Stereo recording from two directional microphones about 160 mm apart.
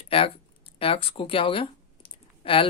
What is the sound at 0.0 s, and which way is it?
Speech, 35° left (ahead or behind).